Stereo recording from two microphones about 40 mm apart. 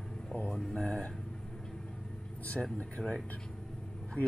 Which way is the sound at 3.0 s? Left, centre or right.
Right.